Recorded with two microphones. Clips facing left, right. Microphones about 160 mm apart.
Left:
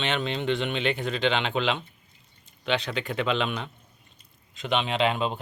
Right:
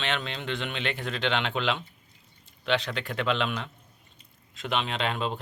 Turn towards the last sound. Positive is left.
turn(degrees=5)  # may be behind; listen again after turning